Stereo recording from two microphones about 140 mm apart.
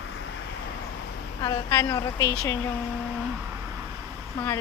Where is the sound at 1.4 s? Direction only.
25° left (ahead or behind).